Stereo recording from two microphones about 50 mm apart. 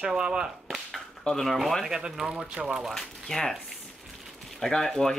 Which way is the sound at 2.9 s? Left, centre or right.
Centre.